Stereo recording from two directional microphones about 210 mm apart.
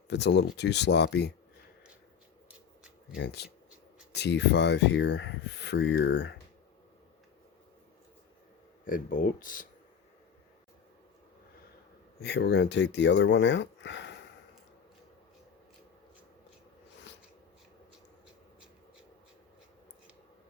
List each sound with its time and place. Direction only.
0.1 s speech: 55° left (ahead or behind)
3.2 s speech: 55° left (ahead or behind)
8.8 s speech: 40° left (ahead or behind)
12.2 s speech: 55° left (ahead or behind)